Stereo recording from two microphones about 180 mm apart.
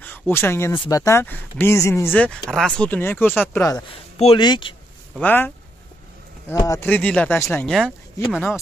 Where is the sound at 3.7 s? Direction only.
30° left (ahead or behind).